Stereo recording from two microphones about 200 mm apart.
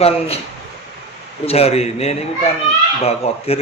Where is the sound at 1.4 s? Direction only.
30° left (ahead or behind).